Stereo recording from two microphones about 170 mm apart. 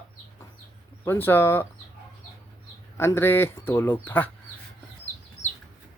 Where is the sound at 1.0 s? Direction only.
10° left (ahead or behind).